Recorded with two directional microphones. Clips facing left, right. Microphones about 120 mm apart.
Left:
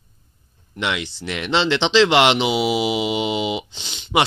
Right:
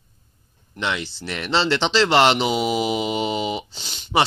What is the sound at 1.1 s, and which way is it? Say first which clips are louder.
Mantra: left 2 dB; centre (ahead or behind).